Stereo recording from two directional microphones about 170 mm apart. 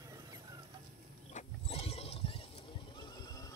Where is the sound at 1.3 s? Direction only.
35° left (ahead or behind).